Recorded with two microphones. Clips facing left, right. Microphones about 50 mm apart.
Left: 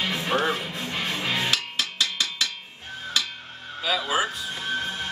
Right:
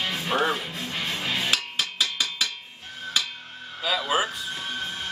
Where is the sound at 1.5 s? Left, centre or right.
Centre.